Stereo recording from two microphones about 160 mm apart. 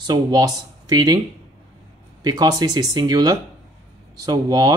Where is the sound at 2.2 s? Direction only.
25° right (ahead or behind).